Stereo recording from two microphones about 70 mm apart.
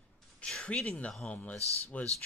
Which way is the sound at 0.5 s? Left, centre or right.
Centre.